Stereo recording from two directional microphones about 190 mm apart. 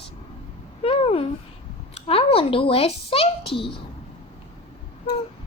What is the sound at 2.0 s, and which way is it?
A child's voice, 30° left (ahead or behind).